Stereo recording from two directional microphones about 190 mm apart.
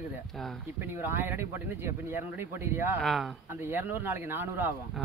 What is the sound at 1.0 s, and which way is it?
Speech, 10° right (ahead or behind).